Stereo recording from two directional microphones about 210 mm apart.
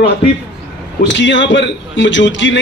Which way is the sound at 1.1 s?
60° left (ahead or behind).